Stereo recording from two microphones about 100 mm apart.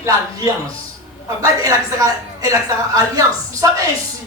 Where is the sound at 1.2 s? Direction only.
35° right (ahead or behind).